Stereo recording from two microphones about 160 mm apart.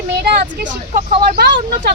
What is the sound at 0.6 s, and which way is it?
Speech, 55° right (ahead or behind).